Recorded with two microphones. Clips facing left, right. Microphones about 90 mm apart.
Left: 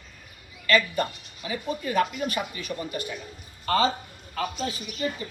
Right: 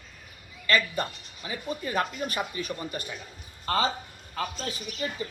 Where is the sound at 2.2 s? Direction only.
40° right (ahead or behind).